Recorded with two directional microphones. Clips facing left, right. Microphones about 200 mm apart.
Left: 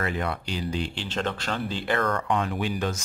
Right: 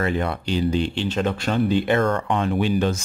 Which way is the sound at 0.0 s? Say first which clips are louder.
Right 5 dB; 25° right (ahead or behind).